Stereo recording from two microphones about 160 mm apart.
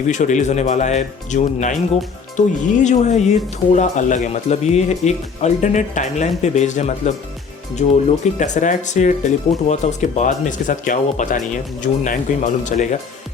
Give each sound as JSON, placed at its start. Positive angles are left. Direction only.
{"t": 0.1, "sound": "speech", "side_deg": 50}